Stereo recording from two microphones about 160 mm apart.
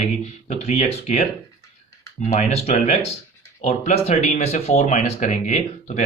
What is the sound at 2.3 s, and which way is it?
Speech, 40° left (ahead or behind).